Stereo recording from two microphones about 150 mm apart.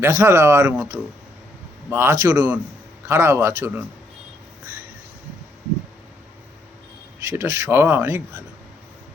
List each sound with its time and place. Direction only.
0.0 s a man's voice: 20° right (ahead or behind)
1.9 s a man's voice: 15° right (ahead or behind)
7.3 s a man's voice: 20° right (ahead or behind)